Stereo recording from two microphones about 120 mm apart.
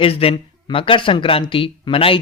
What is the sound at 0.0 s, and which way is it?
Speech, 55° left (ahead or behind).